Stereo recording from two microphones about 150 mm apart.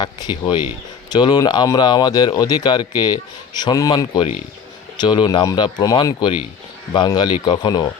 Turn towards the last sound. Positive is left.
turn(degrees=30)  # may be behind; listen again after turning